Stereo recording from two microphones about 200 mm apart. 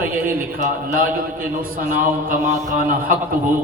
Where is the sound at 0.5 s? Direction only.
45° right (ahead or behind).